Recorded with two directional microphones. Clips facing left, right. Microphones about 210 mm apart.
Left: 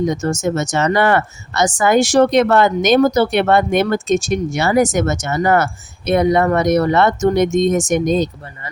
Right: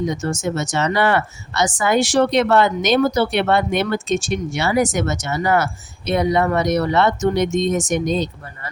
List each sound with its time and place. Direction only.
0.0 s speech: 45° left (ahead or behind)